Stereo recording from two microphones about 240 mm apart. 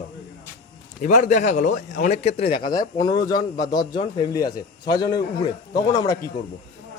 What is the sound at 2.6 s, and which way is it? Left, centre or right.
Speech, left.